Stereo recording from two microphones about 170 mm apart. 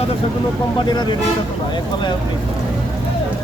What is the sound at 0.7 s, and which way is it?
Speech, 25° left (ahead or behind).